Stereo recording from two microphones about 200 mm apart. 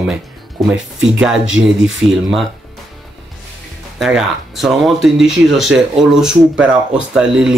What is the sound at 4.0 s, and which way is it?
Speech, centre (ahead or behind).